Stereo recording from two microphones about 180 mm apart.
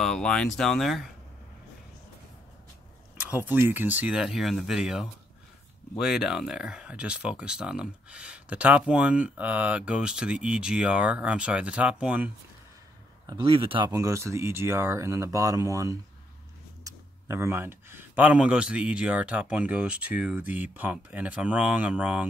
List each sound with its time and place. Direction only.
0.0 s speech: 5° left (ahead or behind)
3.2 s speech: 10° right (ahead or behind)
13.3 s speech: 30° right (ahead or behind); by 22.3 s 10° right (ahead or behind)